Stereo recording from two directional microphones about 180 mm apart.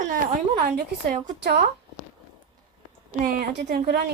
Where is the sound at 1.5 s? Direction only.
65° right (ahead or behind).